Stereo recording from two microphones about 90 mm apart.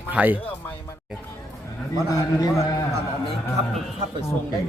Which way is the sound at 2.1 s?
40° left (ahead or behind).